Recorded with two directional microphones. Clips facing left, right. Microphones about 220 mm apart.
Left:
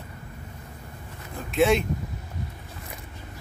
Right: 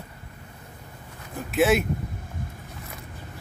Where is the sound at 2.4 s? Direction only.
50° right (ahead or behind).